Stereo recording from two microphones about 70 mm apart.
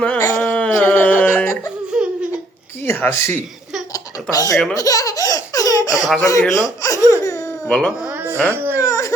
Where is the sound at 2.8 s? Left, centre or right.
Left.